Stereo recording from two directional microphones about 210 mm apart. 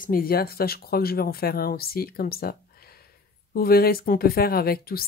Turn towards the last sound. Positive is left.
turn(degrees=45)  # may be behind; listen again after turning